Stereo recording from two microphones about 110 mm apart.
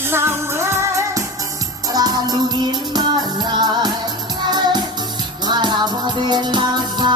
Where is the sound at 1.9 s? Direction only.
35° right (ahead or behind).